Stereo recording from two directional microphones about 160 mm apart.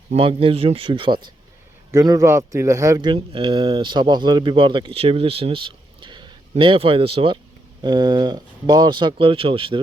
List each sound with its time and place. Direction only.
0.1 s speech: 35° right (ahead or behind)
1.9 s speech: 20° right (ahead or behind)